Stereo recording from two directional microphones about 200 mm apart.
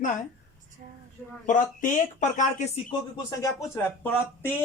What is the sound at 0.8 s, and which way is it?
Speech, 45° right (ahead or behind).